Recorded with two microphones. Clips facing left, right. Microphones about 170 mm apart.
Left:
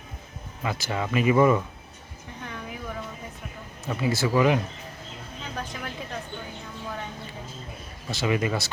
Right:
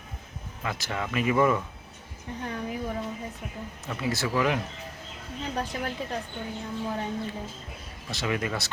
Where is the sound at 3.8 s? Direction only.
5° left (ahead or behind).